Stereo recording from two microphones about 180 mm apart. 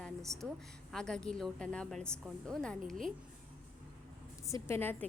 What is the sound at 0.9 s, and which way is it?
A woman's voice, 5° left (ahead or behind).